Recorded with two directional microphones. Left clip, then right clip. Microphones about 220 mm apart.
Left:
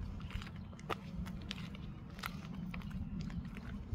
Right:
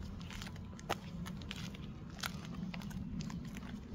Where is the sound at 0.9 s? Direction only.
40° right (ahead or behind).